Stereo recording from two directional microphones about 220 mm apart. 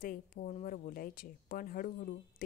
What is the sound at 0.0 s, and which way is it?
Speech, 40° left (ahead or behind).